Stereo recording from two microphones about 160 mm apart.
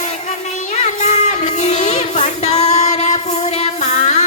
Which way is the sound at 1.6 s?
45° left (ahead or behind).